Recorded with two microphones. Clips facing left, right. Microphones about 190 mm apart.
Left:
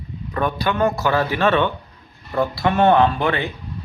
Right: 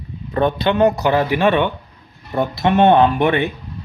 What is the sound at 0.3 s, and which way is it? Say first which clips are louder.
Speech: right 5 dB; 25° right (ahead or behind).